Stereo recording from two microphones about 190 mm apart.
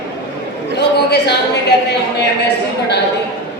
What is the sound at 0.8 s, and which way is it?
A man's voice, 60° left (ahead or behind).